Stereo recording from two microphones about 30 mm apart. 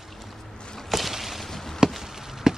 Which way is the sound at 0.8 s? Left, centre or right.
Centre.